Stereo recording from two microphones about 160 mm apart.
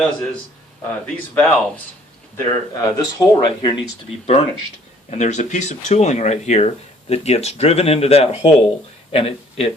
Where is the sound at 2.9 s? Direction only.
25° left (ahead or behind).